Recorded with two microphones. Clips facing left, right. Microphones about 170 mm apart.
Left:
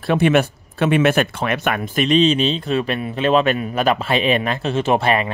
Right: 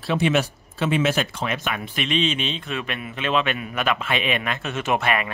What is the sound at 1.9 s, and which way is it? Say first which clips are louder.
Speech: left 9 dB; 40° left (ahead or behind).